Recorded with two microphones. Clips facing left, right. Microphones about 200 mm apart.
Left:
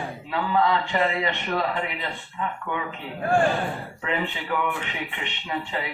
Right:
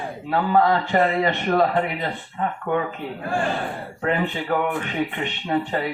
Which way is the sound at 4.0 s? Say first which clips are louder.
Right 6 dB; 45° right (ahead or behind).